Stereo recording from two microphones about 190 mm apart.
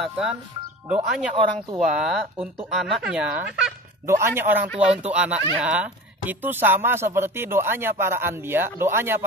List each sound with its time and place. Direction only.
0.0 s speech: 5° right (ahead or behind)
0.9 s speech: 30° right (ahead or behind)
1.8 s speech: centre (ahead or behind)